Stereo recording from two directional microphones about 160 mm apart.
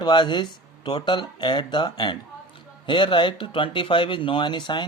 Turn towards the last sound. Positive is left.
turn(degrees=30)  # may be behind; listen again after turning